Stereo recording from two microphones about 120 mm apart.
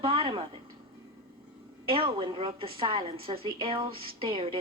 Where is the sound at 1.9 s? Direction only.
50° right (ahead or behind).